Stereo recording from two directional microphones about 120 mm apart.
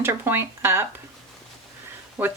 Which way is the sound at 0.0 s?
20° right (ahead or behind).